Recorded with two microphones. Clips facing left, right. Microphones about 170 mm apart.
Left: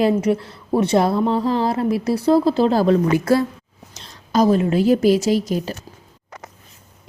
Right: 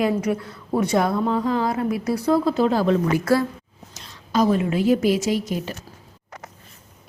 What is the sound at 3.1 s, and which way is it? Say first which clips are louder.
Speech: left 3 dB; 25° left (ahead or behind).